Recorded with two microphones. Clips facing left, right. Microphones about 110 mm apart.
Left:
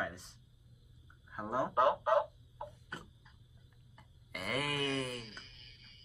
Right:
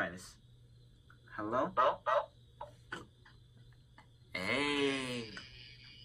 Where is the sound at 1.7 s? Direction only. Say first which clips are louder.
Left 4 dB; 25° left (ahead or behind).